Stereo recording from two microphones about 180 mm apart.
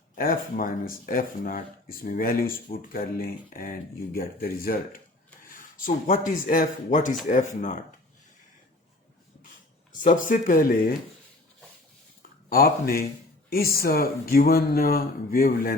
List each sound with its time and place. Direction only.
0.2 s speech: 50° left (ahead or behind)
9.9 s speech: 45° left (ahead or behind)
12.5 s speech: 55° left (ahead or behind)